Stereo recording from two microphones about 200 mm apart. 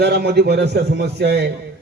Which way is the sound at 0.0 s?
55° right (ahead or behind).